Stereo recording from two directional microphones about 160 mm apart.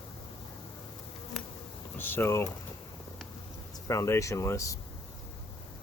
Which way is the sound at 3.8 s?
20° left (ahead or behind).